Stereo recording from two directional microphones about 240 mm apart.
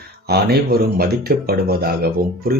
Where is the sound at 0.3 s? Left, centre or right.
Right.